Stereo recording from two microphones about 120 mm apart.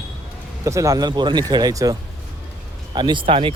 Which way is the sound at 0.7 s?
25° right (ahead or behind).